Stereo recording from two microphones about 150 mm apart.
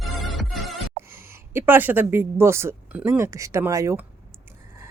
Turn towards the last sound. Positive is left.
turn(degrees=-20)  # may be behind; listen again after turning